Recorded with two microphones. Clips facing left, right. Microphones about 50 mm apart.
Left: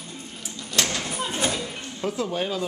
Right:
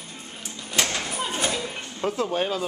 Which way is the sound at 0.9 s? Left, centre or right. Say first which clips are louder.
Even; centre.